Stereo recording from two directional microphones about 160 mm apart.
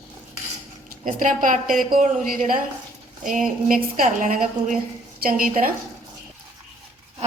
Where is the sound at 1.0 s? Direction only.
55° right (ahead or behind).